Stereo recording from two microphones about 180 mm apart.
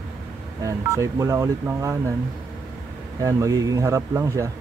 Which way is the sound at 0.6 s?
15° right (ahead or behind).